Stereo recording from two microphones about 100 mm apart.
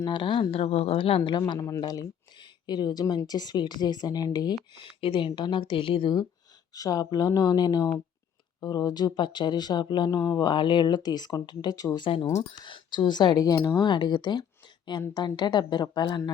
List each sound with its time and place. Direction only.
0.0 s speech: 50° left (ahead or behind)
0.5 s a woman's voice: 85° left; by 1.3 s 65° left (ahead or behind)
1.3 s speech: 50° left (ahead or behind)
1.5 s speech: 30° left (ahead or behind)
1.9 s speech: 45° left (ahead or behind)
6.7 s speech: 35° left (ahead or behind)
10.2 s speech: 30° left (ahead or behind)
10.4 s speech: 50° left (ahead or behind)
11.9 s speech: 55° left (ahead or behind)